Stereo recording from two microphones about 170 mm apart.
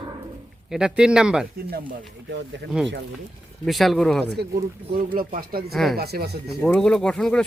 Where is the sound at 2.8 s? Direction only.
5° right (ahead or behind).